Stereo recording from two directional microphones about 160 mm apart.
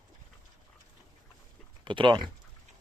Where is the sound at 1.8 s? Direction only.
30° right (ahead or behind).